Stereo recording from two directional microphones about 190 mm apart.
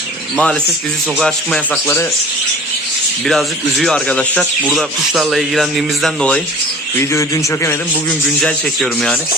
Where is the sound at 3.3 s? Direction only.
Centre (ahead or behind).